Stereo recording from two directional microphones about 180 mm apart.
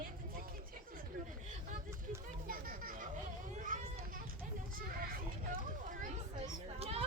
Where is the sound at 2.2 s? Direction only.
50° right (ahead or behind).